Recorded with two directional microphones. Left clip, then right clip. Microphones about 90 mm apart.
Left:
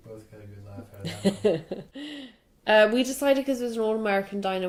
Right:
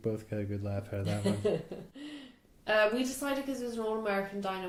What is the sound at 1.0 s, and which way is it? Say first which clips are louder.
A woman's voice: left 8 dB; 35° left (ahead or behind).